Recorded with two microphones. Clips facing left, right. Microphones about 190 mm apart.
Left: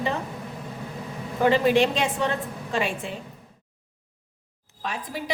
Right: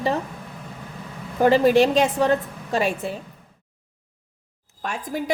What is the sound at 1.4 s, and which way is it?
A woman's voice, 40° right (ahead or behind).